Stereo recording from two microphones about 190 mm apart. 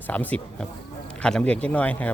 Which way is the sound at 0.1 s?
10° left (ahead or behind).